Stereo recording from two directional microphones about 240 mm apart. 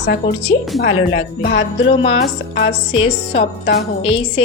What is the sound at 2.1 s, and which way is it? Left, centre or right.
Speech, left.